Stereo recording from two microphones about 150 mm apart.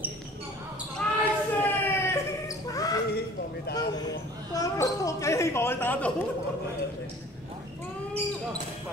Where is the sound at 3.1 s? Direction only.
90° left.